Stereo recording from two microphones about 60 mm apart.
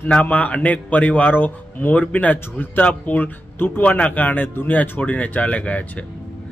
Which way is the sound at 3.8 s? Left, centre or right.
Left.